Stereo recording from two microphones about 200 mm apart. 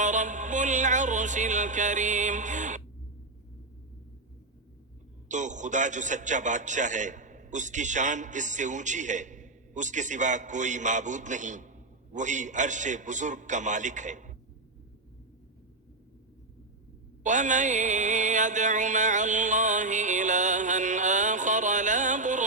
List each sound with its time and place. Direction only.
0.0 s music: 40° right (ahead or behind)
5.3 s a man's voice: 40° right (ahead or behind)
17.2 s music: 40° right (ahead or behind)